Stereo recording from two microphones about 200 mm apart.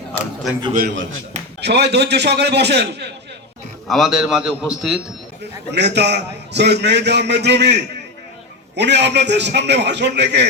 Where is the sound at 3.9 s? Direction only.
Centre (ahead or behind).